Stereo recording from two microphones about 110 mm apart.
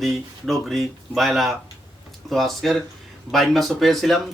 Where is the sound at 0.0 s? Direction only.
Centre (ahead or behind).